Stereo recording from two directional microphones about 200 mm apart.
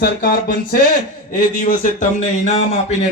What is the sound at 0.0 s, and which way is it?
Speech, 50° left (ahead or behind).